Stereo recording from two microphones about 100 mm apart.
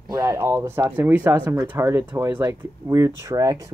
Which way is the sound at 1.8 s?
30° right (ahead or behind).